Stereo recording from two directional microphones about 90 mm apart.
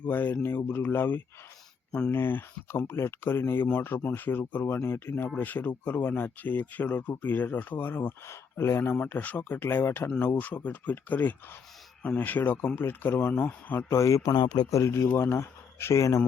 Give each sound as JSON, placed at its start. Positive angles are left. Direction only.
{"t": 0.0, "sound": "speech", "side_deg": 20}
{"t": 14.0, "sound": "speech", "side_deg": 40}
{"t": 14.4, "sound": "a man's voice", "side_deg": 50}
{"t": 14.7, "sound": "speech", "side_deg": 35}